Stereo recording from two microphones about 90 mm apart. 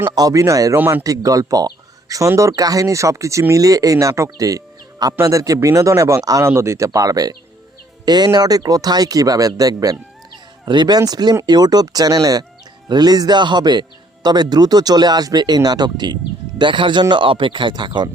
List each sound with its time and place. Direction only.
0.1 s speech: 45° right (ahead or behind)
0.8 s a man's voice: 20° right (ahead or behind)
1.0 s speech: 40° right (ahead or behind)
10.7 s speech: 55° right (ahead or behind)
16.6 s speech: 65° right (ahead or behind)